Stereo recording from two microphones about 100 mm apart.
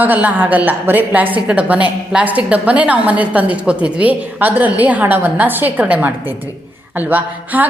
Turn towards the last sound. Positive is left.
turn(degrees=-15)  # may be behind; listen again after turning